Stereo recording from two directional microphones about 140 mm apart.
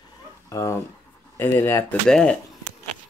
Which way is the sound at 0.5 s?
20° left (ahead or behind).